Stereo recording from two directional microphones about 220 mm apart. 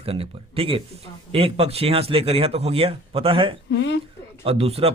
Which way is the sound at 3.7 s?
55° left (ahead or behind).